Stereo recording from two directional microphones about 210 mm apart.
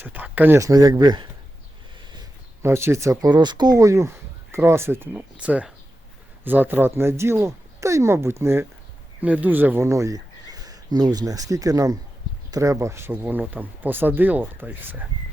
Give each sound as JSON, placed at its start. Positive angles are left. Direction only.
{"t": 0.0, "sound": "speech", "side_deg": -10}